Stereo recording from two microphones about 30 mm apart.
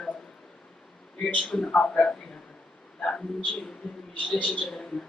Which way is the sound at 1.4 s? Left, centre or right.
Centre.